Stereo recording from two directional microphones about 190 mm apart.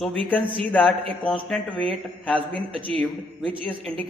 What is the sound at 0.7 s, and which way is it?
A man's voice, 10° left (ahead or behind).